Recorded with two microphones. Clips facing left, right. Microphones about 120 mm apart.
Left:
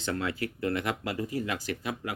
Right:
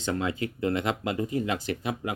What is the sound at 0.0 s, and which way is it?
Speech, 20° right (ahead or behind).